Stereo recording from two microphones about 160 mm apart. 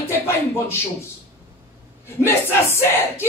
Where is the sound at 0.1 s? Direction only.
15° left (ahead or behind).